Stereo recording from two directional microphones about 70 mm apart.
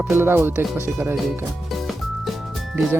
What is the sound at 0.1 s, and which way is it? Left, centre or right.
Speech, right.